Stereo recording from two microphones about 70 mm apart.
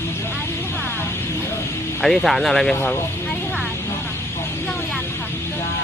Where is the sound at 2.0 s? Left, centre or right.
Centre.